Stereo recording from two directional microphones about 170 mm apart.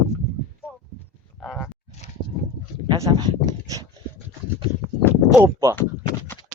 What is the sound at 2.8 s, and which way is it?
Speech, 25° right (ahead or behind).